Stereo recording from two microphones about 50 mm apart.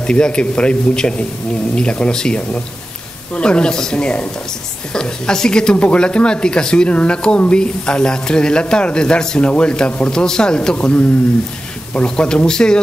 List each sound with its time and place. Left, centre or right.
0.0 s a man's voice: centre